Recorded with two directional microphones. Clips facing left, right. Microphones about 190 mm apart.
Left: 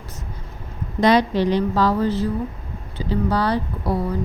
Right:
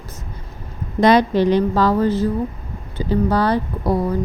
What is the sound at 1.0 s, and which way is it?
A woman's voice, 50° right (ahead or behind).